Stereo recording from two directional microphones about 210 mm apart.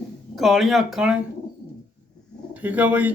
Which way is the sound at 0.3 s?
Centre (ahead or behind).